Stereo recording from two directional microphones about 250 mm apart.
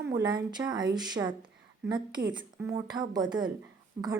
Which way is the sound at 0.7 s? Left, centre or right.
Centre.